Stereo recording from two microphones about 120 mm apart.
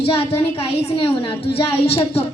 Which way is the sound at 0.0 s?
50° left (ahead or behind).